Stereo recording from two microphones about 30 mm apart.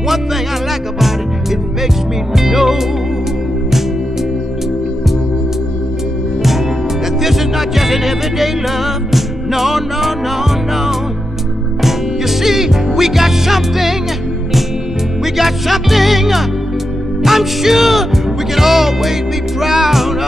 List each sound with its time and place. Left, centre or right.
2.3 s music: centre
7.2 s music: centre
15.3 s music: centre